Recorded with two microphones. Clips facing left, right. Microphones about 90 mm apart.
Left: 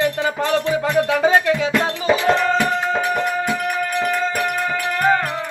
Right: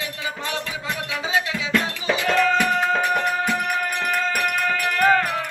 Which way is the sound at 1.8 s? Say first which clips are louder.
Left 6 dB; 35° left (ahead or behind).